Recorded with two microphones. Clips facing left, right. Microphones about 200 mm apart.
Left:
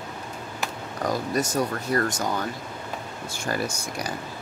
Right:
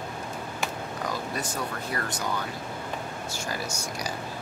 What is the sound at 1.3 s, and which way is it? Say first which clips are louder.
Speech: left 7 dB; 40° left (ahead or behind).